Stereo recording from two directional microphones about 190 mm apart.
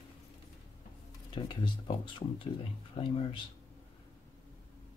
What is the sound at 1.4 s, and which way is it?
Speech, 25° left (ahead or behind).